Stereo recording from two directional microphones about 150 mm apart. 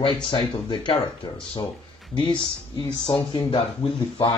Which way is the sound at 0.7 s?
30° left (ahead or behind).